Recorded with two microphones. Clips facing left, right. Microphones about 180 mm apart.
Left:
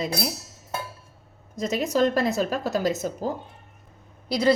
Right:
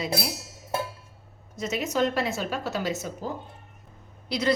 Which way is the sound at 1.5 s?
35° left (ahead or behind).